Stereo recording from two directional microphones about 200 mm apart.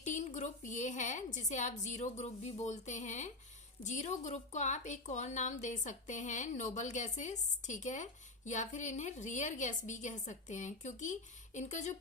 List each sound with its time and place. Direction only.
0.0 s speech: 40° left (ahead or behind)